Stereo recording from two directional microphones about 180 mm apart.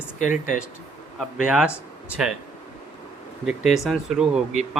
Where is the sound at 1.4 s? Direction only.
5° right (ahead or behind).